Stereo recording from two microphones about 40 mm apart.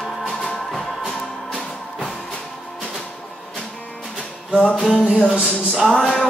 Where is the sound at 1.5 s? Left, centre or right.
Left.